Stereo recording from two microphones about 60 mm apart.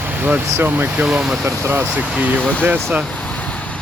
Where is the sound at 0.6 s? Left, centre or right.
Right.